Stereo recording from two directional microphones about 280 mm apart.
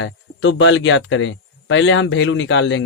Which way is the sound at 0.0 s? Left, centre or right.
Left.